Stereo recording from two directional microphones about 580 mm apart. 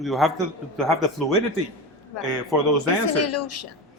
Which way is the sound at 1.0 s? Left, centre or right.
Right.